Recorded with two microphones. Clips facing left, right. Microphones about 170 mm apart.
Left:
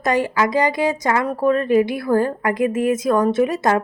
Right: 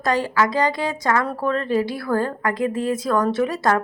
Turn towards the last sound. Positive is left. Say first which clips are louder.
# left 3 dB
turn(degrees=20)  # may be behind; listen again after turning